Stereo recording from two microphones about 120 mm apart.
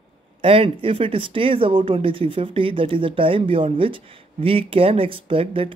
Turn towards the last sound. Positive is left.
turn(degrees=-50)  # may be behind; listen again after turning